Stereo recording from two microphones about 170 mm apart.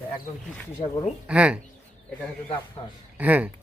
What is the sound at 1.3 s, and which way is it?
Speech, 5° right (ahead or behind).